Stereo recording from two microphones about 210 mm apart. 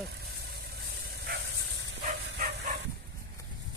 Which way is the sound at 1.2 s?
55° right (ahead or behind).